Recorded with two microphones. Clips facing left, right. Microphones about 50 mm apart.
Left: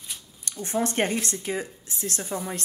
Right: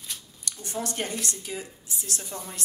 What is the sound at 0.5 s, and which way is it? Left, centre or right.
Speech, left.